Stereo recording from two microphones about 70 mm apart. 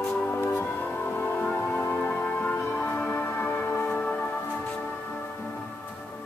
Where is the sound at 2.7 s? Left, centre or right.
Left.